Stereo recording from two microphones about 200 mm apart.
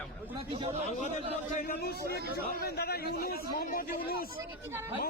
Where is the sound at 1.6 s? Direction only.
50° left (ahead or behind).